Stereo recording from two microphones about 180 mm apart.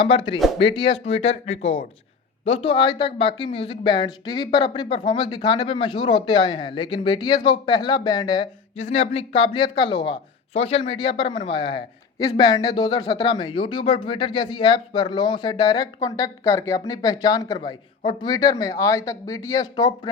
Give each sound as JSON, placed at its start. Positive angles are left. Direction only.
{"t": 0.0, "sound": "speech", "side_deg": 30}
{"t": 8.8, "sound": "speech", "side_deg": 35}